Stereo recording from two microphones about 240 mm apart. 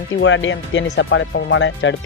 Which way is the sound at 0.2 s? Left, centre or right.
Left.